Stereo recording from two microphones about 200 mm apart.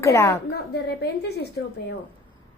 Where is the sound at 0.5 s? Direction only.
55° left (ahead or behind).